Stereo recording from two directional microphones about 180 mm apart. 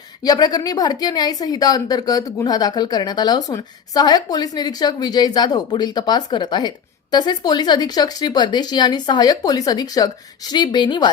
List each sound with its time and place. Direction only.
0.2 s a woman's voice: 20° left (ahead or behind)